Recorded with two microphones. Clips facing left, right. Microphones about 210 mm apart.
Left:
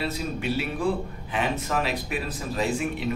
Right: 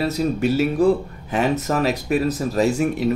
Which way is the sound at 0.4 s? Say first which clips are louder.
Right 9 dB; 45° right (ahead or behind).